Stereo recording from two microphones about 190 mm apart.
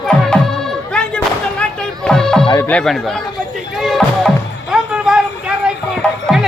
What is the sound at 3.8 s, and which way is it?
Music, centre (ahead or behind).